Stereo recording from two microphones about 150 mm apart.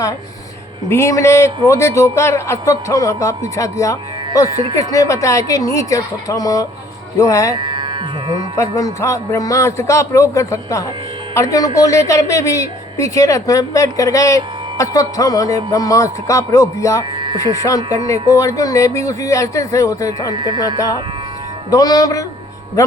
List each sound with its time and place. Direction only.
0.9 s a woman's voice: 20° left (ahead or behind)
7.5 s speech: 30° right (ahead or behind)
8.7 s a woman's voice: 20° left (ahead or behind)
17.0 s a sound: 30° right (ahead or behind)
17.3 s a woman's voice: 20° left (ahead or behind)
20.3 s music: 30° right (ahead or behind)
20.6 s a woman's voice: 25° left (ahead or behind)